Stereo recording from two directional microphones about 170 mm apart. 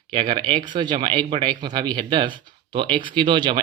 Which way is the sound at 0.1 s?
30° right (ahead or behind).